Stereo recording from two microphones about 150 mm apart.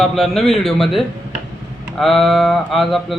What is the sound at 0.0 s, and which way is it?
Speech, centre (ahead or behind).